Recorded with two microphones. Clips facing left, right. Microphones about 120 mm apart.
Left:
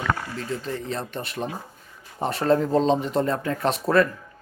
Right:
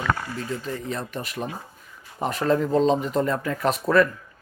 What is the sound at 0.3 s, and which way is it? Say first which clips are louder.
Speech: even; 35° left (ahead or behind).